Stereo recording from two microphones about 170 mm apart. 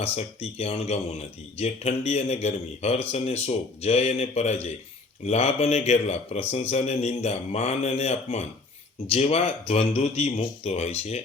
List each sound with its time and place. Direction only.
0.0 s speech: 35° left (ahead or behind)